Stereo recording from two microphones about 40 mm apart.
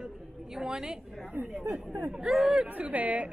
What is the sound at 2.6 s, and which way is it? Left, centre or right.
Speech, right.